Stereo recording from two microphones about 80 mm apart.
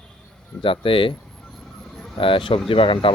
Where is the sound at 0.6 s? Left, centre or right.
Left.